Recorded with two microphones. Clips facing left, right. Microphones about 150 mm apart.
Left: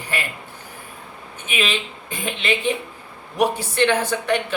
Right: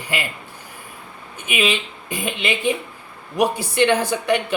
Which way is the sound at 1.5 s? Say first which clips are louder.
Right 3 dB; 10° right (ahead or behind).